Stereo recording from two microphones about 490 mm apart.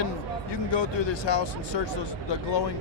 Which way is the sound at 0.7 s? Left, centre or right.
Left.